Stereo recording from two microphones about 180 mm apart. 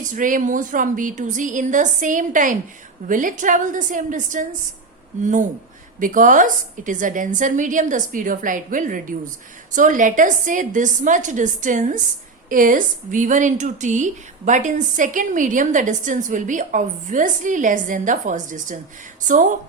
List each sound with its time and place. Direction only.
0.0 s a woman's voice: 45° right (ahead or behind)